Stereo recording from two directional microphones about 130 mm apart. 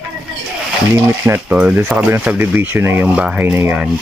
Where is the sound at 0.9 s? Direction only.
20° right (ahead or behind).